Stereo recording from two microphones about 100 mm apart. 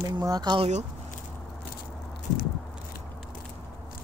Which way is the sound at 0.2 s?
40° right (ahead or behind).